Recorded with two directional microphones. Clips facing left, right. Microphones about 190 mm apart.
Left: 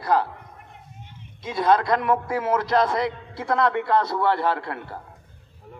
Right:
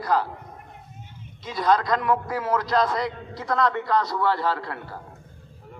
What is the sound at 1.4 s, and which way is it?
A man's voice, 25° left (ahead or behind).